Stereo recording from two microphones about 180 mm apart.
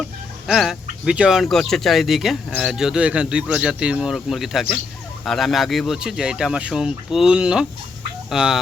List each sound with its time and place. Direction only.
0.0 s speech: centre (ahead or behind)